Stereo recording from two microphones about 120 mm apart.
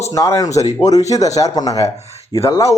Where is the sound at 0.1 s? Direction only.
25° left (ahead or behind).